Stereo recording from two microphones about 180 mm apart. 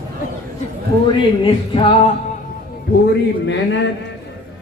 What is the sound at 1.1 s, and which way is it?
Speech, 30° left (ahead or behind).